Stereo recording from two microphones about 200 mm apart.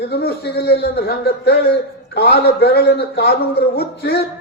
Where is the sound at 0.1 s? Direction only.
55° left (ahead or behind).